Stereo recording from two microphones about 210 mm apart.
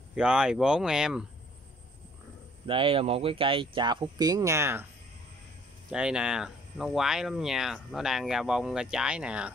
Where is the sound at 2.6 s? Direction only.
25° right (ahead or behind).